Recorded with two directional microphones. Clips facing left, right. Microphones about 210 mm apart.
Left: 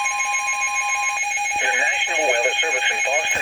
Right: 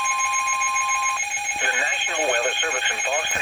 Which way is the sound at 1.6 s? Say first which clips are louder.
Even; 20° left (ahead or behind).